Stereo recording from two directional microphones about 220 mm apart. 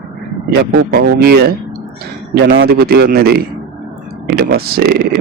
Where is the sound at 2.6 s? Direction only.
45° right (ahead or behind).